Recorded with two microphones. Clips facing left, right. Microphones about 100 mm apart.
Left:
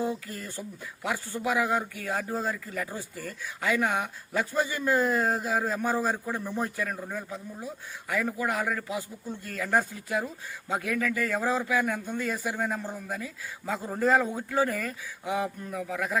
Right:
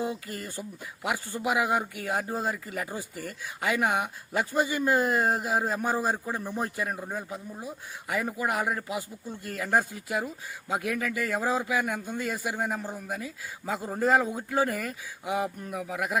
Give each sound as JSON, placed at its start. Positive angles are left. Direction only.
{"t": 1.0, "sound": "speech", "side_deg": -15}